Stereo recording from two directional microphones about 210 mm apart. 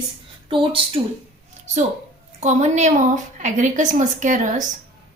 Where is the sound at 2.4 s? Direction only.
35° right (ahead or behind).